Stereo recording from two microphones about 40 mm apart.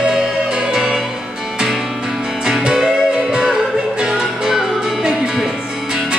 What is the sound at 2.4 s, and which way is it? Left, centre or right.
Music, centre.